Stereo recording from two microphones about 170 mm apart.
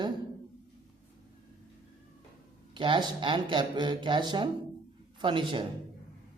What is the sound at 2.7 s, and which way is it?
Speech, 30° right (ahead or behind).